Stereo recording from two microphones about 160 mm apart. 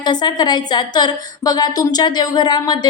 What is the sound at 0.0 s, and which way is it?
A woman's voice, 25° left (ahead or behind).